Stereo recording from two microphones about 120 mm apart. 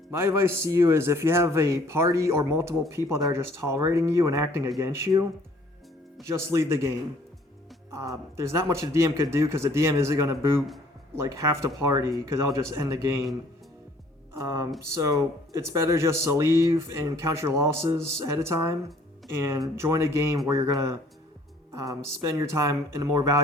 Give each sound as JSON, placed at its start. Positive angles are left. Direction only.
{"t": 0.1, "sound": "speech", "side_deg": -20}
{"t": 6.2, "sound": "speech", "side_deg": -25}
{"t": 14.3, "sound": "speech", "side_deg": -30}